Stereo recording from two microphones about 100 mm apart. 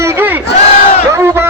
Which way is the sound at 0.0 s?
20° right (ahead or behind).